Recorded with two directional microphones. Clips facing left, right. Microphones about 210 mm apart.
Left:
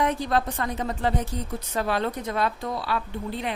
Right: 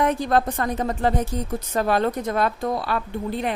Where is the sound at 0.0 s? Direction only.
50° right (ahead or behind).